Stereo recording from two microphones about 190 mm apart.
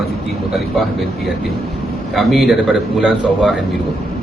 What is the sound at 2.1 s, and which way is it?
A man's voice, centre (ahead or behind).